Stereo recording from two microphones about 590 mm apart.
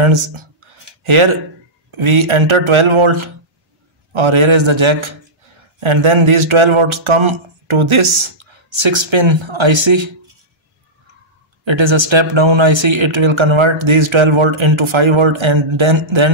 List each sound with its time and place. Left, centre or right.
0.0 s speech: right
11.6 s speech: right